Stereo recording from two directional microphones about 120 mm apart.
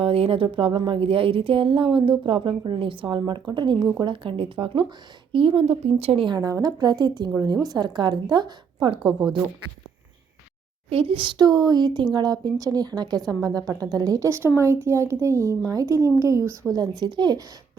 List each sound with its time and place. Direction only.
0.0 s speech: 50° right (ahead or behind)
6.2 s a woman's voice: 30° right (ahead or behind)
10.8 s a woman's voice: 50° right (ahead or behind)